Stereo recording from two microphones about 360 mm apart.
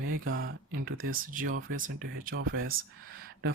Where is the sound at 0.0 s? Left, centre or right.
Right.